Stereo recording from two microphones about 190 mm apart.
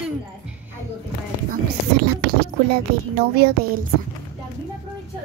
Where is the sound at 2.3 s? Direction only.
55° right (ahead or behind).